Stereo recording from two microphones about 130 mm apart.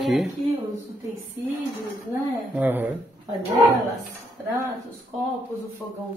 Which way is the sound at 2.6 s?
15° right (ahead or behind).